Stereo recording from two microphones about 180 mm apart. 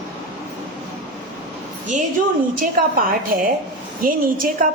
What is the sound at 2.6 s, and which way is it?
A woman's voice, 50° right (ahead or behind).